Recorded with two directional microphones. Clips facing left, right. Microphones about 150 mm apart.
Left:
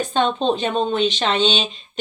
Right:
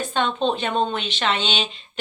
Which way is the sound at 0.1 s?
20° left (ahead or behind).